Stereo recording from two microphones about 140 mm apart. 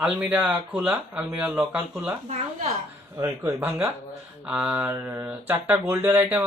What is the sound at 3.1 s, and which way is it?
Speech, 25° right (ahead or behind).